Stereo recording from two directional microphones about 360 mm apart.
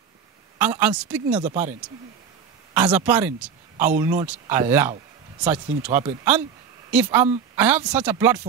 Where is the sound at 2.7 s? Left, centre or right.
Centre.